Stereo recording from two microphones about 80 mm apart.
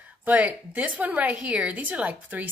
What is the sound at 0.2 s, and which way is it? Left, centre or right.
A woman's voice, right.